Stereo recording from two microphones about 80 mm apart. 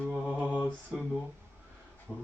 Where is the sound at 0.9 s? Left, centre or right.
Centre.